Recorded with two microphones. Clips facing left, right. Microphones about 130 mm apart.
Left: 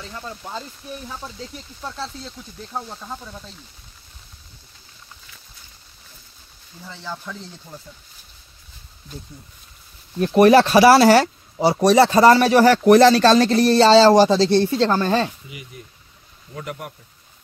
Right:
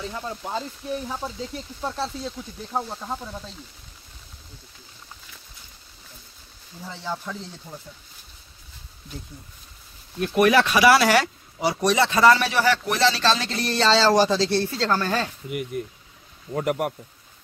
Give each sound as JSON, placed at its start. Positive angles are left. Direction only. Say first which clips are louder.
{"t": 0.0, "sound": "speech", "louder": "right 3 dB", "side_deg": -15}
{"t": 6.9, "sound": "speech", "louder": "right 2 dB", "side_deg": -10}
{"t": 10.2, "sound": "speech", "louder": "left 6 dB", "side_deg": 35}
{"t": 15.7, "sound": "speech", "louder": "right 11 dB", "side_deg": -60}